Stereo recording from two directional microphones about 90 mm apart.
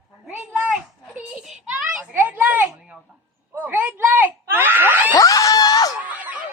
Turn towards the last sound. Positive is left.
turn(degrees=-20)  # may be behind; listen again after turning